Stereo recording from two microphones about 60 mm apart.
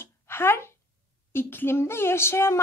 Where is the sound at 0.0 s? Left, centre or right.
Left.